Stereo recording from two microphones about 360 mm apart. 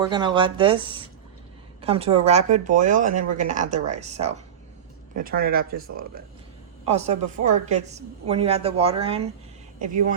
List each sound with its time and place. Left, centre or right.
0.0 s a woman's voice: centre
6.8 s a woman's voice: centre
7.3 s a woman's voice: right
7.6 s a woman's voice: centre